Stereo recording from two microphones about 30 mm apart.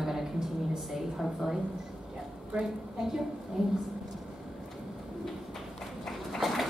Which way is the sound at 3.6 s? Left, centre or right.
Centre.